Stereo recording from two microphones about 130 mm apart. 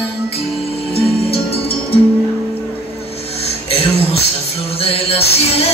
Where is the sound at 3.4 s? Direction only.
50° left (ahead or behind).